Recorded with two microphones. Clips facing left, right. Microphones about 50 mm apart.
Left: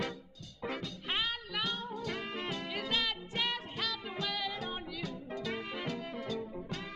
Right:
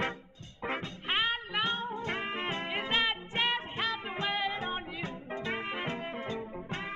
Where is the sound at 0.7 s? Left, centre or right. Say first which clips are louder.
Right 4 dB; right.